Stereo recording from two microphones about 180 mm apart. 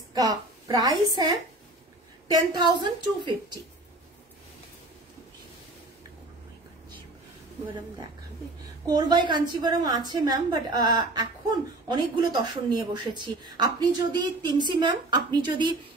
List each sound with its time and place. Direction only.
0.1 s a woman's voice: 20° right (ahead or behind)
2.2 s speech: 20° right (ahead or behind)
8.8 s speech: 25° right (ahead or behind)